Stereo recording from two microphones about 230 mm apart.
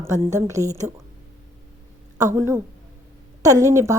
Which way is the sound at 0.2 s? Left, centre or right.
Right.